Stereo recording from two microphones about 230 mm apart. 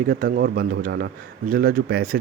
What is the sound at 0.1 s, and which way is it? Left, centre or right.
A man's voice, right.